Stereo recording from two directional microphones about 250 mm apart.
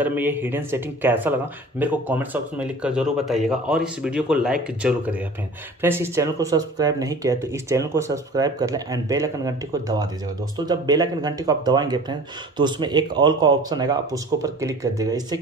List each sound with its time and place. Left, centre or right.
0.0 s speech: centre